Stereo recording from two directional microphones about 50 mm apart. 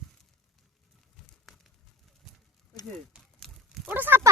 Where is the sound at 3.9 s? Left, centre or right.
Right.